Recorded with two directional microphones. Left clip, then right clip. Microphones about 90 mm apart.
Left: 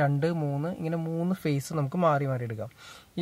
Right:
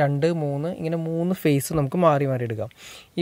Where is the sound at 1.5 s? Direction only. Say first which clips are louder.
Right 8 dB; 35° right (ahead or behind).